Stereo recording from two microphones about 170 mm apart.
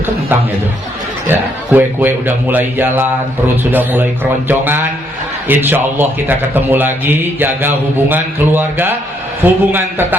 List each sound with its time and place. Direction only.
1.3 s a man's voice: 10° right (ahead or behind)